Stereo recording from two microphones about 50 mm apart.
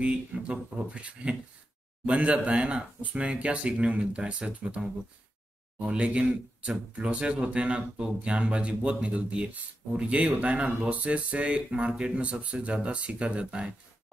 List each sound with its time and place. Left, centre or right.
0.0 s speech: right